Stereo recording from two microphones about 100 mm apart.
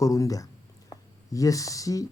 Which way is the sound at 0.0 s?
35° left (ahead or behind).